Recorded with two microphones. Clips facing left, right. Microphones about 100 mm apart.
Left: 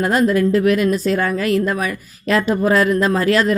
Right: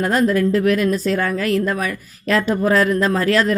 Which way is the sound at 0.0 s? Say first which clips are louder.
Left 1 dB; 10° left (ahead or behind).